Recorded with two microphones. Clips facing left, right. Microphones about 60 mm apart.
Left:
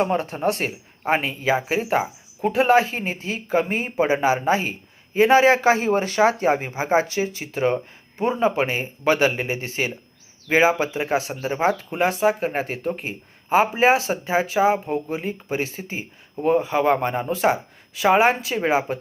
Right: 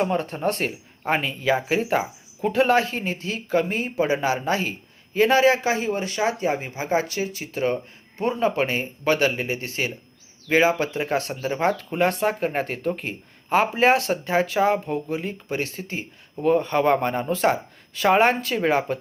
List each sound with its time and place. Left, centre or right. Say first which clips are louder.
0.0 s speech: left 2 dB; centre
1.3 s speech: even; left
1.5 s speech: left 1 dB; centre
14.8 s speech: left 1 dB; centre